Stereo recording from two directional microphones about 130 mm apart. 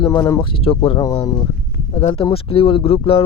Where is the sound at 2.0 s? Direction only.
50° left (ahead or behind).